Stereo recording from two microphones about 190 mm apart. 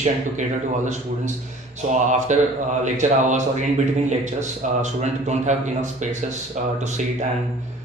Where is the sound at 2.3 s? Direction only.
40° right (ahead or behind).